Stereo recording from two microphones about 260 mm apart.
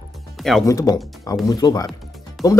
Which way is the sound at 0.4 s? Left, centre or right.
Centre.